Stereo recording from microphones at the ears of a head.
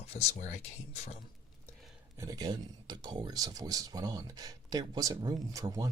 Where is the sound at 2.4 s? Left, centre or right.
Right.